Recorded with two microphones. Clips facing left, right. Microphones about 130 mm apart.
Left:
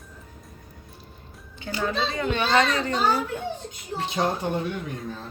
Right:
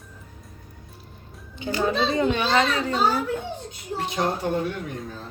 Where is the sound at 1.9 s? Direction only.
20° right (ahead or behind).